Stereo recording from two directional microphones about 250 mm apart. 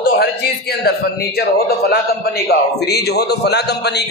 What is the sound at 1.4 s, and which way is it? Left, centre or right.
A man's voice, left.